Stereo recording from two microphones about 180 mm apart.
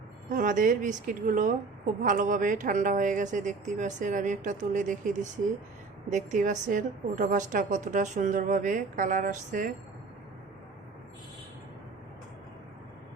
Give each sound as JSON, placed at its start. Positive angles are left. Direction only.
{"t": 0.3, "sound": "a woman's voice", "side_deg": -45}